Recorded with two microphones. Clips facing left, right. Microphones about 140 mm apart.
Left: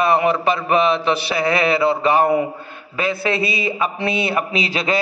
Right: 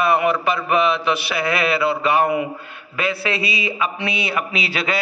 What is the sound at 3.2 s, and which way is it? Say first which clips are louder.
Speech: left 3 dB; 45° left (ahead or behind).